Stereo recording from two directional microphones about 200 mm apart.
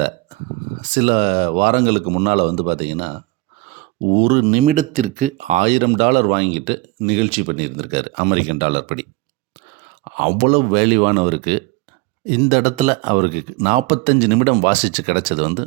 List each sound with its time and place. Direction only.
0.0 s speech: 40° right (ahead or behind)
10.2 s speech: 30° right (ahead or behind)